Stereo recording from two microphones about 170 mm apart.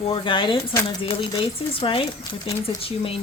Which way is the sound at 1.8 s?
30° left (ahead or behind).